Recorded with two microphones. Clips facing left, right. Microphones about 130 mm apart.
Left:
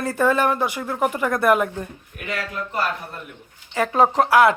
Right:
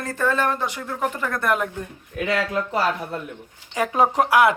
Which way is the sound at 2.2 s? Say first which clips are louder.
Right 5 dB; 90° right.